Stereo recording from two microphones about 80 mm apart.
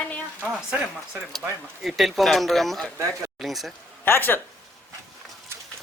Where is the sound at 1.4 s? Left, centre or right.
Right.